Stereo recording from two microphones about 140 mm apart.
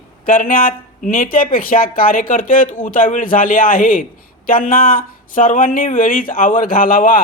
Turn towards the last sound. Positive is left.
turn(degrees=90)